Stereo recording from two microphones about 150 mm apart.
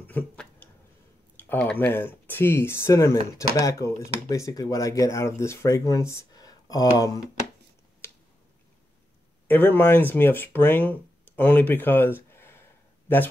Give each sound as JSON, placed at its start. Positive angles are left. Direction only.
{"t": 0.0, "sound": "a sound", "side_deg": 10}
{"t": 1.3, "sound": "speech", "side_deg": 10}
{"t": 9.5, "sound": "speech", "side_deg": 10}